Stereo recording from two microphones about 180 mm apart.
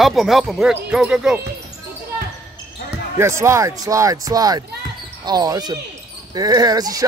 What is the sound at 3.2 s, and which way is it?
Speech, 15° right (ahead or behind).